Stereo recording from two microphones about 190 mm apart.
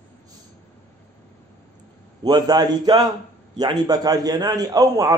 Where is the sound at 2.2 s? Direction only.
20° right (ahead or behind).